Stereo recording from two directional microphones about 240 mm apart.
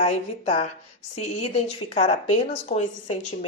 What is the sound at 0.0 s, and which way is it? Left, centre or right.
Speech, left.